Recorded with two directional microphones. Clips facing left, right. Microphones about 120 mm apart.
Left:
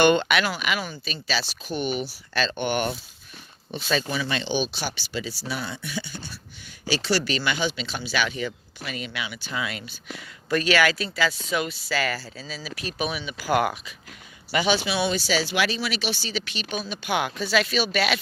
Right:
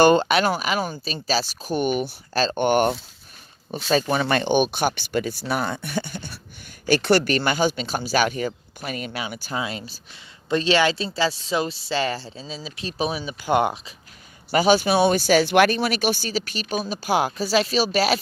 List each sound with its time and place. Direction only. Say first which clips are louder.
0.0 s speech: right 3 dB; 35° right (ahead or behind)
4.1 s speech: right 7 dB; 50° right (ahead or behind); by 13.9 s 25° right (ahead or behind)
14.5 s speech: right 6 dB; 40° right (ahead or behind)